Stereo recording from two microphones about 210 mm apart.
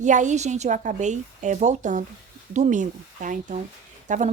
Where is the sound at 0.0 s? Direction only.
35° right (ahead or behind).